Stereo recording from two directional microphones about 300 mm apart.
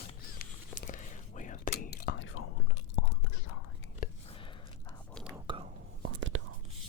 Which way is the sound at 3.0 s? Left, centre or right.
Left.